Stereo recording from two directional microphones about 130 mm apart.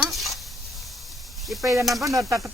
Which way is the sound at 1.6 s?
15° right (ahead or behind).